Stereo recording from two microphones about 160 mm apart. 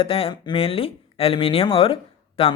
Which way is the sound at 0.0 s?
35° left (ahead or behind).